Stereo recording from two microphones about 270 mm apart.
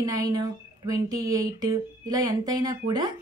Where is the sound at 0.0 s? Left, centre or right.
Centre.